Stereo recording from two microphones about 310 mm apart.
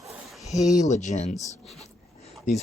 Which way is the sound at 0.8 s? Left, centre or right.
Left.